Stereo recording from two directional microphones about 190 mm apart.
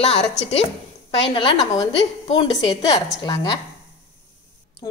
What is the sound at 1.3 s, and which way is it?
A woman's voice, 20° left (ahead or behind).